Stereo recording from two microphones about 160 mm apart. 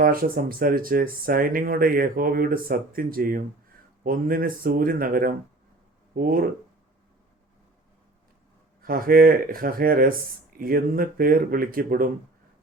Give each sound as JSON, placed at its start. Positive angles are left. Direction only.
{"t": 0.0, "sound": "speech", "side_deg": -65}
{"t": 8.8, "sound": "speech", "side_deg": -65}